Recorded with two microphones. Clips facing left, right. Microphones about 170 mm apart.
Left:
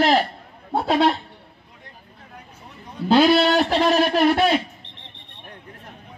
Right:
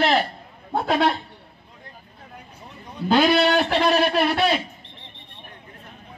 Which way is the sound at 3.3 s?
35° left (ahead or behind).